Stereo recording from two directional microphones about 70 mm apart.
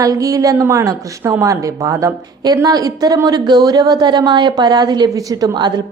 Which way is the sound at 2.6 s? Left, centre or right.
Right.